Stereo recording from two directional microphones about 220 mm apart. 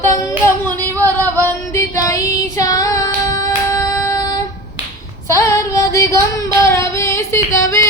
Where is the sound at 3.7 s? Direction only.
15° left (ahead or behind).